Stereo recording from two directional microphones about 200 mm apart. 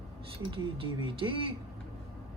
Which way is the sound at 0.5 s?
25° right (ahead or behind).